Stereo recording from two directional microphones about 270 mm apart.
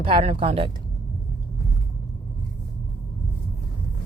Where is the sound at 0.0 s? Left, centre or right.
Right.